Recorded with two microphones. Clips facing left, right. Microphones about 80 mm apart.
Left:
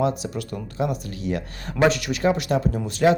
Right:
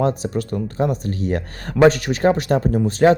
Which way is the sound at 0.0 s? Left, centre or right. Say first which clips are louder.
Right 4 dB; right.